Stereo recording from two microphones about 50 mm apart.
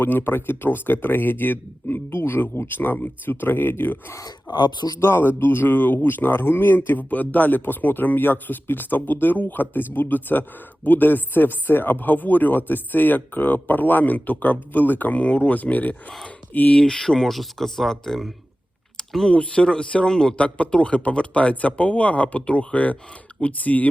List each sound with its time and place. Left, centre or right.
0.0 s speech: left
4.9 s speech: left
16.2 s a sound: left
16.7 s speech: centre
18.9 s typing: centre
19.3 s speech: left